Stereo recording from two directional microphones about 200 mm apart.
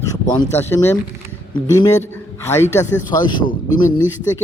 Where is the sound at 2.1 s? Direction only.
15° left (ahead or behind).